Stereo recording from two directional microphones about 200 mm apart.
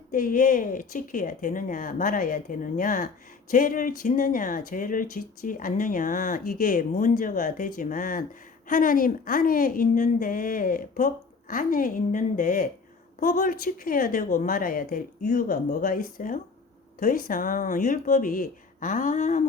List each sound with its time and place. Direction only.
0.1 s a woman's voice: 40° left (ahead or behind)